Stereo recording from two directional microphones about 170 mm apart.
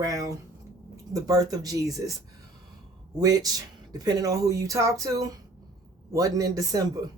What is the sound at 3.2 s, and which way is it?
Speech, 20° right (ahead or behind).